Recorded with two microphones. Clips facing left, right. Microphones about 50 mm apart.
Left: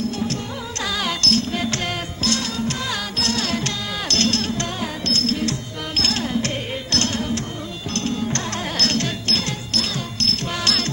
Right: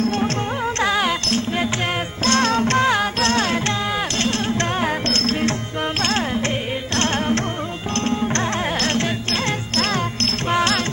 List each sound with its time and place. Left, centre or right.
0.8 s music: right
2.2 s music: right
2.9 s music: right
4.1 s music: right
4.5 s music: right
6.9 s carnatic music: right
7.9 s music: right